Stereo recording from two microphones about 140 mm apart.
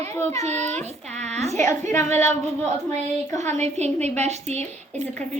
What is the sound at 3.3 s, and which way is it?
A child's voice, 55° right (ahead or behind).